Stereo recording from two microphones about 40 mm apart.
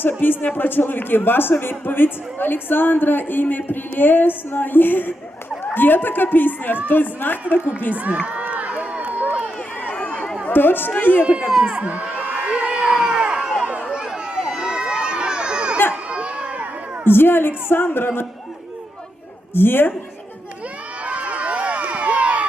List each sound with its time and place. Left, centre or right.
0.4 s a woman's voice: left
7.9 s speech: right
8.2 s crowd: right
9.0 s run: right
9.9 s run: left
10.5 s a woman's voice: left
11.2 s speech: right
11.6 s crowd: right
12.9 s crowd: centre
13.8 s run: centre
16.0 s a sound: right
17.1 s a woman's voice: left
19.5 s a woman's voice: left
21.0 s run: right